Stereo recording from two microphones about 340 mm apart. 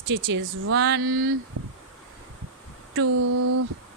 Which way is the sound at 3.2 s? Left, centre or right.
Right.